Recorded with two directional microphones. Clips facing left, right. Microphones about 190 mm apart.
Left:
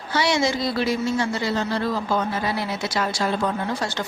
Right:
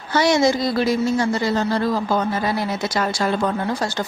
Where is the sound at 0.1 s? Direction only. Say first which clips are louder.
Right 5 dB; 45° right (ahead or behind).